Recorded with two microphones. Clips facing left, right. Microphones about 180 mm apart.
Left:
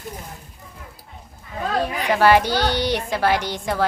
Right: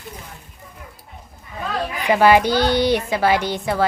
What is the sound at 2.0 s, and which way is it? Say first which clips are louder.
A woman's voice: right 3 dB; 10° right (ahead or behind).